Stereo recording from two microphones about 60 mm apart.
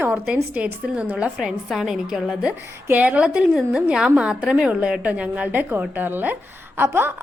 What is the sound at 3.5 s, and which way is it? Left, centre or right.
A woman's voice, centre.